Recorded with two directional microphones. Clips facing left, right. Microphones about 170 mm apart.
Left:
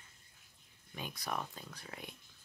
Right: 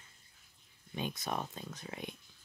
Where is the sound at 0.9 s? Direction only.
20° right (ahead or behind).